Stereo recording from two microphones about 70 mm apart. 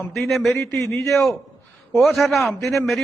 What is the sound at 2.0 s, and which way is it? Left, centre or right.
Speech, centre.